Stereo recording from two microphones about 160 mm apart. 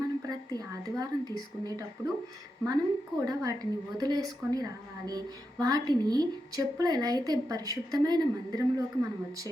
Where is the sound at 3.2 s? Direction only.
20° right (ahead or behind).